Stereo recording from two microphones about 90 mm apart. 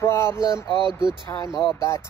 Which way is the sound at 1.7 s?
30° left (ahead or behind).